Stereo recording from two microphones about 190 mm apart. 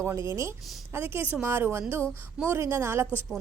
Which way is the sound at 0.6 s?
Centre (ahead or behind).